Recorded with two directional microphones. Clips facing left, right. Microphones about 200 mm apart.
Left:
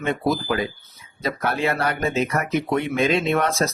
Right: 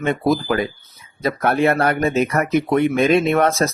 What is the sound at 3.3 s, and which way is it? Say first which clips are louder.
Speech: right 4 dB; 55° right (ahead or behind).